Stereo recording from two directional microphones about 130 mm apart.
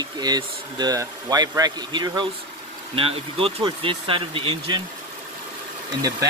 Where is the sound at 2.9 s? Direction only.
45° right (ahead or behind).